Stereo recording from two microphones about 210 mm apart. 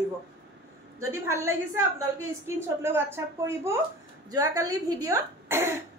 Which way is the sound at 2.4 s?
10° right (ahead or behind).